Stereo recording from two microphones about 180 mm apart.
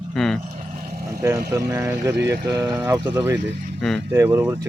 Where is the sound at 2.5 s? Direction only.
20° right (ahead or behind).